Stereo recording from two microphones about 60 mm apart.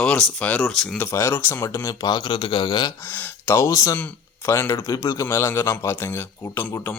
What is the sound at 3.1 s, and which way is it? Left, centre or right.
Speech, left.